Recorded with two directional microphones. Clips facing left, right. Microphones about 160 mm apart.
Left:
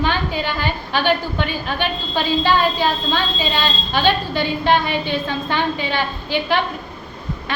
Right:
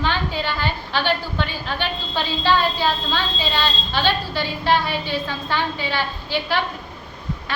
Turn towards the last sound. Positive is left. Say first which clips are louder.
# left 3 dB
turn(degrees=20)  # may be behind; listen again after turning